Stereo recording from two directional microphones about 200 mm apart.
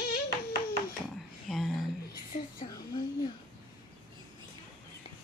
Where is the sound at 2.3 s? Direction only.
35° left (ahead or behind).